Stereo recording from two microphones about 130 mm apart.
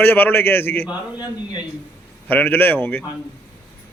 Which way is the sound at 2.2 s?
15° left (ahead or behind).